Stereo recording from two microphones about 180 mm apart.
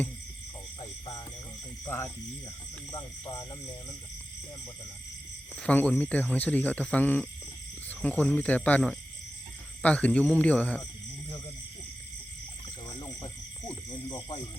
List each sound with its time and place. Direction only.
0.8 s frog: 25° left (ahead or behind)
1.8 s speech: 15° left (ahead or behind)
2.9 s speech: 25° left (ahead or behind)
5.5 s speech: 5° left (ahead or behind)
12.9 s a sound: 20° left (ahead or behind)
14.1 s speech: 20° left (ahead or behind)